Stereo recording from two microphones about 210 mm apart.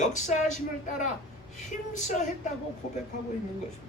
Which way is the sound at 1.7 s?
35° left (ahead or behind).